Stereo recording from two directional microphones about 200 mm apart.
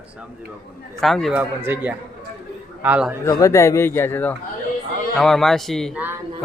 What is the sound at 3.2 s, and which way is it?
A man's voice, 15° left (ahead or behind).